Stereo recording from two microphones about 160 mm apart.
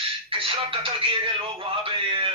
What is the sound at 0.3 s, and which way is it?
Speech, 35° right (ahead or behind).